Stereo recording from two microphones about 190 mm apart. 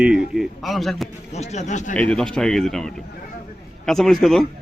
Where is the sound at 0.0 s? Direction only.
5° right (ahead or behind).